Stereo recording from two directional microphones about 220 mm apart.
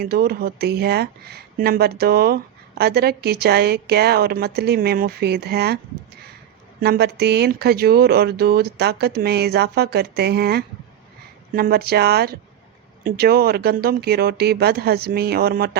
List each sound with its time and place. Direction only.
0.0 s speech: 45° right (ahead or behind)